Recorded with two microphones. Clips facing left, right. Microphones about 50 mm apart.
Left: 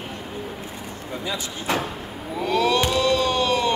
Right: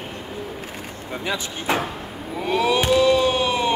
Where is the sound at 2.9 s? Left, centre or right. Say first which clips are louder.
Right 4 dB; centre.